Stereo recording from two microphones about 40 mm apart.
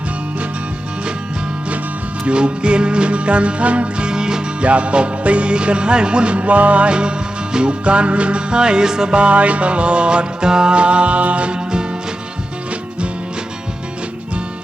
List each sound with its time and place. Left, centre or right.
2.2 s music: right
4.0 s music: centre
4.6 s music: right